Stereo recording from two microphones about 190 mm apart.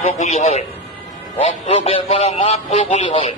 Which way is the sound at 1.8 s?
30° left (ahead or behind).